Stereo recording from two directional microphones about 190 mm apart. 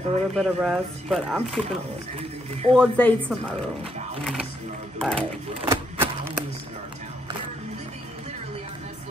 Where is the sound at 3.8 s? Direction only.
30° right (ahead or behind).